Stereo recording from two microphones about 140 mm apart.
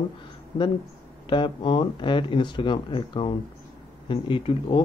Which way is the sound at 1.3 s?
35° left (ahead or behind).